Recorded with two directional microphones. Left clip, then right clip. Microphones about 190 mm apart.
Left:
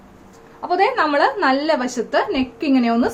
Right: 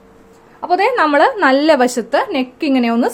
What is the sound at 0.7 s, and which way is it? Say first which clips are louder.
A woman's voice: right 4 dB; 45° right (ahead or behind).